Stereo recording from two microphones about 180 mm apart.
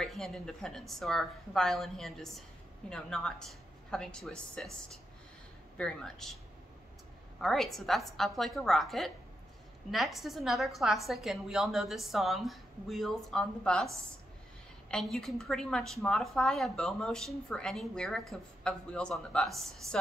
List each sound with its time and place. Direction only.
0.0 s a woman's voice: centre (ahead or behind)
5.8 s a woman's voice: 5° left (ahead or behind)
7.3 s a woman's voice: centre (ahead or behind)
14.9 s a woman's voice: 5° left (ahead or behind)
19.8 s speech: 15° right (ahead or behind)